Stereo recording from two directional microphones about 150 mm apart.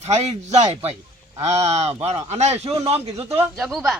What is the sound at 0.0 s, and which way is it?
Speech, 45° right (ahead or behind).